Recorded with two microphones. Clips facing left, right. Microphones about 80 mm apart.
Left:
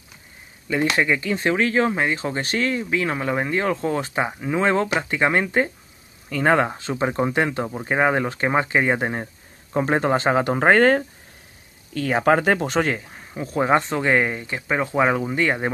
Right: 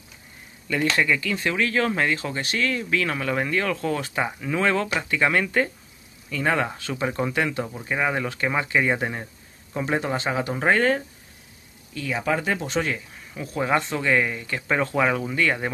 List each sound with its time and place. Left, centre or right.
0.7 s speech: centre
6.2 s speech: left
14.5 s speech: centre
15.0 s speech: left